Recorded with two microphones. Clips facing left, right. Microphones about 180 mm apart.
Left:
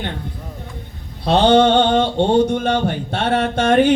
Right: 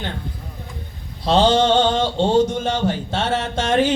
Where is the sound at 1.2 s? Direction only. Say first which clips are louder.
Left 3 dB; 60° left (ahead or behind).